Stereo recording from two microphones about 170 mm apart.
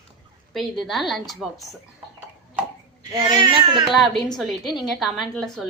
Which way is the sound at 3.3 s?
25° right (ahead or behind).